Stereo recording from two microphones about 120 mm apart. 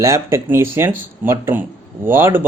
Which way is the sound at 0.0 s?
20° right (ahead or behind).